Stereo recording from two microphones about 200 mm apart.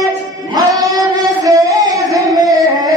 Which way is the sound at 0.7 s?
20° right (ahead or behind).